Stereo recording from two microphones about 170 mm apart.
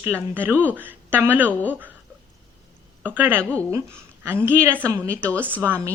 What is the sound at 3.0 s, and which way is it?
Speech, 10° right (ahead or behind).